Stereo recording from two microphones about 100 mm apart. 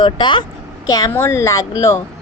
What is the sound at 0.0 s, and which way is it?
Speech, 50° left (ahead or behind).